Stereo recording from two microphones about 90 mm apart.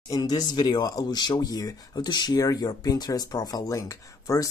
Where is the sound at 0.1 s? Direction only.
50° left (ahead or behind).